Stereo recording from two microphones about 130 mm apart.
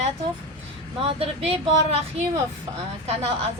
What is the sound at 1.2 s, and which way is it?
Speech, 50° right (ahead or behind).